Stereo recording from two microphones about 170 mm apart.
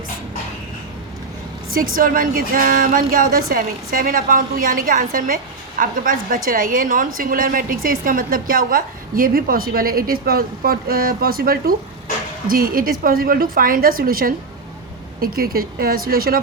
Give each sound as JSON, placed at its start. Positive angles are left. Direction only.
{"t": 1.7, "sound": "a woman's voice", "side_deg": -55}